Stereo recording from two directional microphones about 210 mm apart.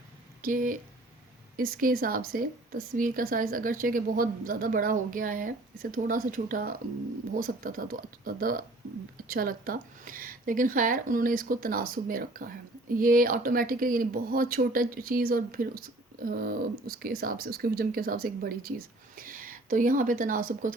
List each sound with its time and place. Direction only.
0.4 s speech: 40° right (ahead or behind)